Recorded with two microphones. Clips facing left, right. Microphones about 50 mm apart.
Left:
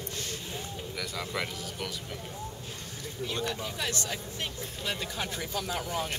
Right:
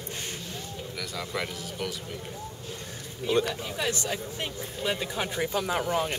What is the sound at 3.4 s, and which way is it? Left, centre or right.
Speech, centre.